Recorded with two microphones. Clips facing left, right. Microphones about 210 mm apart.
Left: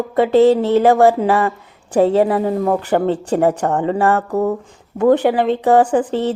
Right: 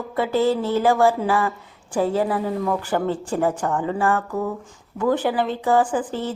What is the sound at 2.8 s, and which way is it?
Speech, 65° left (ahead or behind).